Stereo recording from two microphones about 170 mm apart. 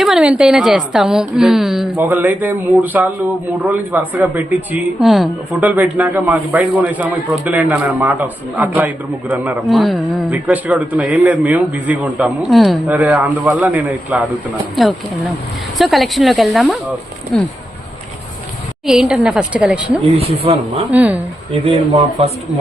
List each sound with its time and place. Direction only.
0.0 s a woman's voice: 5° right (ahead or behind)
15.8 s speech: centre (ahead or behind)
18.9 s speech: 5° right (ahead or behind)
20.1 s speech: 35° right (ahead or behind)
20.9 s a woman's voice: 10° right (ahead or behind)
21.5 s speech: 35° right (ahead or behind)